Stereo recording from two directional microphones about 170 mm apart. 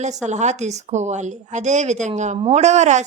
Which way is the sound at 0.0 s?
45° right (ahead or behind).